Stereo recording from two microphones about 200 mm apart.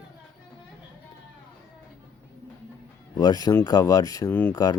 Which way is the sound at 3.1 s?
20° left (ahead or behind).